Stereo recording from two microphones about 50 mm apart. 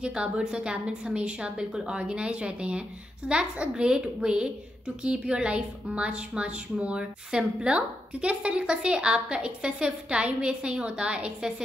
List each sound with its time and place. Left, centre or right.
0.0 s a woman's voice: centre